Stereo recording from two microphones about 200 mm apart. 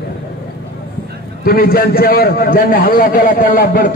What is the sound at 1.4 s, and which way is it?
A man's voice, 45° left (ahead or behind).